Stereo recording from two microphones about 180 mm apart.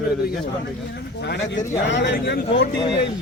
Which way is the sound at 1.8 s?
75° left (ahead or behind).